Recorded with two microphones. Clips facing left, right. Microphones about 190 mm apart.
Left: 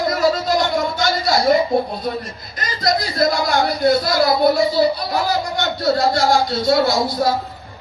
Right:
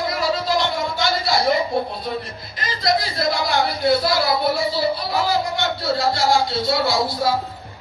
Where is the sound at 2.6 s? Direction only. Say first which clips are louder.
Left 1 dB; 45° left (ahead or behind).